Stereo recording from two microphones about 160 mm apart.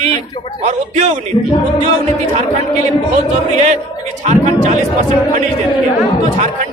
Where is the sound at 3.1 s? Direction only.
45° right (ahead or behind).